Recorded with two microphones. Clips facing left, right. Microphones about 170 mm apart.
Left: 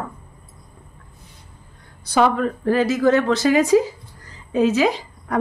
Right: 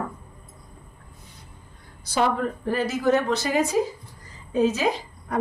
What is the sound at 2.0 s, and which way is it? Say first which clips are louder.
A woman's voice: left 5 dB; 65° left (ahead or behind).